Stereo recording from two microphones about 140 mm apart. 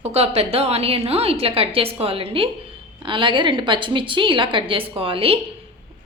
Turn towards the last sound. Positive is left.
turn(degrees=-40)  # may be behind; listen again after turning